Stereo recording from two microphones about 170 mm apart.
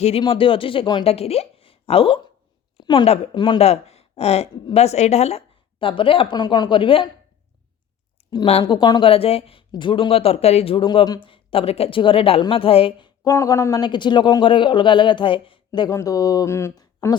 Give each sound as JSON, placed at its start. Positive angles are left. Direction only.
{"t": 0.0, "sound": "speech", "side_deg": 30}
{"t": 4.5, "sound": "speech", "side_deg": 25}
{"t": 4.8, "sound": "speech", "side_deg": 40}
{"t": 8.2, "sound": "a sound", "side_deg": 35}
{"t": 8.6, "sound": "speech", "side_deg": 25}
{"t": 13.2, "sound": "speech", "side_deg": 20}